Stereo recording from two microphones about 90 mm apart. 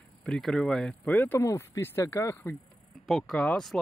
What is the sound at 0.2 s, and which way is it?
Speech, 5° left (ahead or behind).